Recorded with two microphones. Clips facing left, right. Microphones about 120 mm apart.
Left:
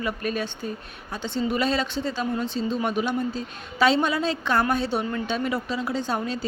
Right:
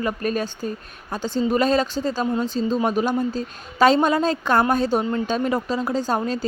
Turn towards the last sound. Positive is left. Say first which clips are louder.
# right 4 dB
turn(degrees=-40)  # may be behind; listen again after turning